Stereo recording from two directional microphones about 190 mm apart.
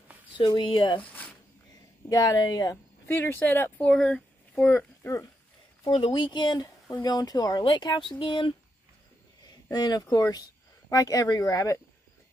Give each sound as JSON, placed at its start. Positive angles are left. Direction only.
{"t": 0.4, "sound": "speech", "side_deg": 25}
{"t": 2.0, "sound": "speech", "side_deg": 20}
{"t": 5.9, "sound": "speech", "side_deg": 30}
{"t": 9.7, "sound": "speech", "side_deg": 20}